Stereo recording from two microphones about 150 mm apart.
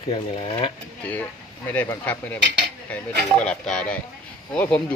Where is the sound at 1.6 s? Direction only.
10° left (ahead or behind).